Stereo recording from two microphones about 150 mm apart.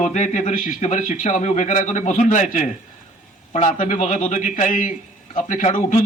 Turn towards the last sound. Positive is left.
turn(degrees=55)  # may be behind; listen again after turning